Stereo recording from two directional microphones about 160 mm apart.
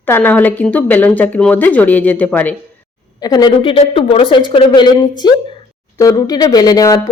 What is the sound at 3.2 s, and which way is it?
Speech, 25° left (ahead or behind).